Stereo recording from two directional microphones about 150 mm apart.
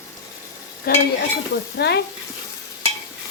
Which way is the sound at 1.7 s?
90° left.